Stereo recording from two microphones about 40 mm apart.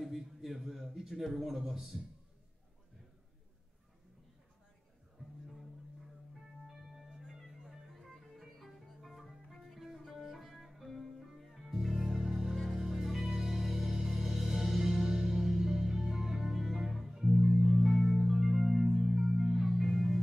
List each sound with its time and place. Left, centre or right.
0.0 s a sound: centre
6.7 s music: centre
11.7 s music: centre